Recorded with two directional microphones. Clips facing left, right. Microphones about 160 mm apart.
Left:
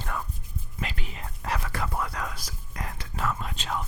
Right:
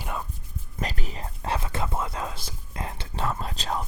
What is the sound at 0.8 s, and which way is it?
Whispering, 40° right (ahead or behind).